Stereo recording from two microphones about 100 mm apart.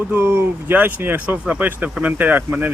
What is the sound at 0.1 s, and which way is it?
Speech, 25° right (ahead or behind).